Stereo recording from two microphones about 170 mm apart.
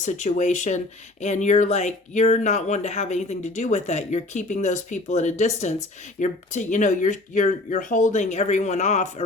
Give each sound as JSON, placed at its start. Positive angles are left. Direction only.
{"t": 0.0, "sound": "speech", "side_deg": 45}